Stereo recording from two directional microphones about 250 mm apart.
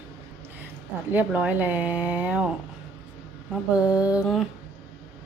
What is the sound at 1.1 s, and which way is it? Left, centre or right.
Speech, centre.